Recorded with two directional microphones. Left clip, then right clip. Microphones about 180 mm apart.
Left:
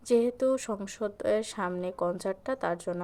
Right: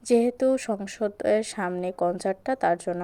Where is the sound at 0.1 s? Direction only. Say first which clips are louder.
Right 4 dB; 20° right (ahead or behind).